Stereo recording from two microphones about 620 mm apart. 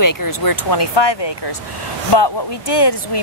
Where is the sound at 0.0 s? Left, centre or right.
Left.